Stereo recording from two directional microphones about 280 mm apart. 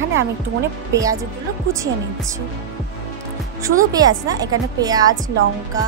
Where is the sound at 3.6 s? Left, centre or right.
Centre.